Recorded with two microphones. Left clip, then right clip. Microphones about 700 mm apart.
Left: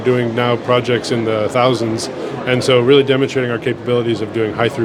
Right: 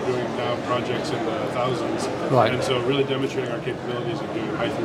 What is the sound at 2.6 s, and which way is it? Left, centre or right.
Speech, left.